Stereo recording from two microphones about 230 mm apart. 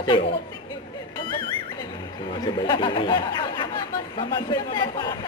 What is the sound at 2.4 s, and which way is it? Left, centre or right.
Speech, centre.